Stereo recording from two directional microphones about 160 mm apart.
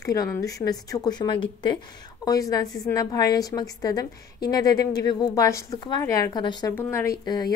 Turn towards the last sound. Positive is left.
turn(degrees=25)  # may be behind; listen again after turning